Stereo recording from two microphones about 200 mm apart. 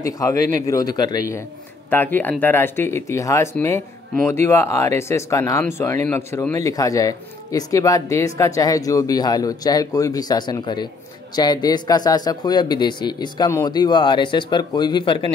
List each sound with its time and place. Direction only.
0.0 s speech: 15° left (ahead or behind)